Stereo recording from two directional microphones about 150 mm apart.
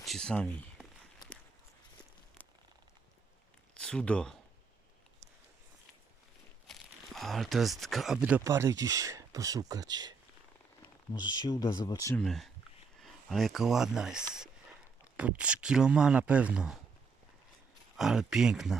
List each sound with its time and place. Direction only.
0.0 s speech: 5° left (ahead or behind)
1.2 s walk: 25° left (ahead or behind)
3.8 s speech: 5° left (ahead or behind)
6.7 s speech: centre (ahead or behind)
8.4 s speech: 20° right (ahead or behind)
11.1 s speech: 30° left (ahead or behind)
12.1 s speech: centre (ahead or behind)
17.9 s speech: 5° right (ahead or behind)